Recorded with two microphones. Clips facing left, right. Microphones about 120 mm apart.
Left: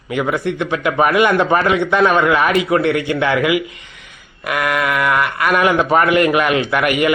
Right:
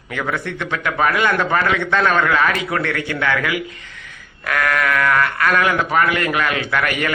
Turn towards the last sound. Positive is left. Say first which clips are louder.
# left 5 dB
turn(degrees=15)  # may be behind; listen again after turning